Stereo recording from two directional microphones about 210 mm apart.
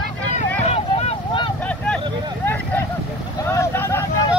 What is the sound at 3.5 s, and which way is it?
Vehicle, 10° left (ahead or behind).